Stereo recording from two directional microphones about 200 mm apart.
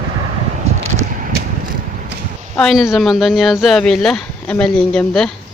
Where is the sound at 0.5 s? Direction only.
35° right (ahead or behind).